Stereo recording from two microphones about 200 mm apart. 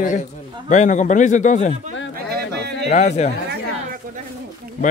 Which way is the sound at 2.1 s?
50° right (ahead or behind).